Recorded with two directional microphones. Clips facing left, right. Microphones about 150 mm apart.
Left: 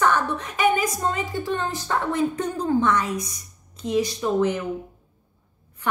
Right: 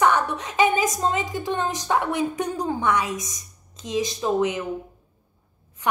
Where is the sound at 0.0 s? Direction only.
15° right (ahead or behind).